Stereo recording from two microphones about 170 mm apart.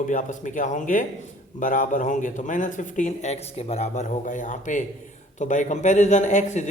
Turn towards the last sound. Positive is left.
turn(degrees=45)  # may be behind; listen again after turning